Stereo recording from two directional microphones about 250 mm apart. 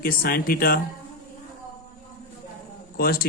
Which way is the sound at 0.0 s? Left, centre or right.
Left.